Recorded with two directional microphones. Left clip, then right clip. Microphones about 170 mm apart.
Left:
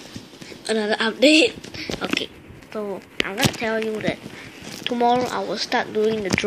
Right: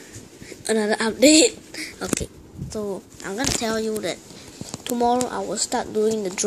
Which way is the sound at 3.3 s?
30° right (ahead or behind).